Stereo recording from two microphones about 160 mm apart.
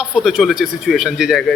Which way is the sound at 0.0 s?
Centre (ahead or behind).